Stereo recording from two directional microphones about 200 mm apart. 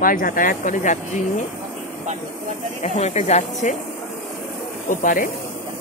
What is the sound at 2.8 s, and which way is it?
Speech, 35° left (ahead or behind).